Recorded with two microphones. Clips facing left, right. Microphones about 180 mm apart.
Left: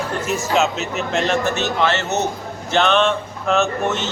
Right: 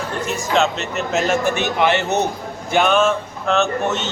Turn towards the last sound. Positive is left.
turn(degrees=0)  # may be behind; listen again after turning